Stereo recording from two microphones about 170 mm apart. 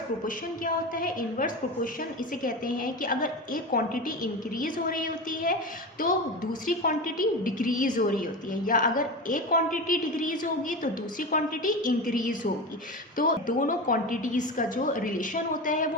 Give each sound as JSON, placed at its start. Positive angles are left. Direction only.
{"t": 0.3, "sound": "a woman's voice", "side_deg": 55}